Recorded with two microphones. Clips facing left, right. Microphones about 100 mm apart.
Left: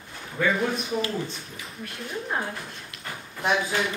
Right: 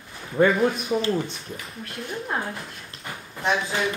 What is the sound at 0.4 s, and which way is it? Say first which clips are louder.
Speech: right 6 dB; 35° right (ahead or behind).